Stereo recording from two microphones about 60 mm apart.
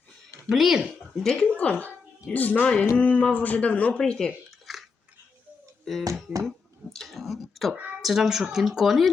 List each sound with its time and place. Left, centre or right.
0.5 s speech: centre
1.1 s speech: centre
1.5 s speech: left
3.9 s speech: centre
4.6 s chewing: centre
5.8 s speech: centre
6.9 s a sound: centre
8.0 s speech: centre